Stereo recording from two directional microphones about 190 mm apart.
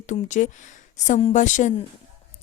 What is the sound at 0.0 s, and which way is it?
Speech, 40° left (ahead or behind).